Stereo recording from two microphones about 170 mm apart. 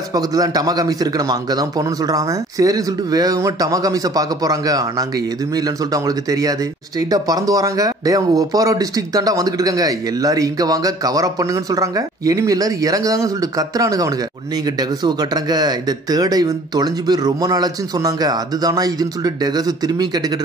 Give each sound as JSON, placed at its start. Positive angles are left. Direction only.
{"t": 0.1, "sound": "speech", "side_deg": -20}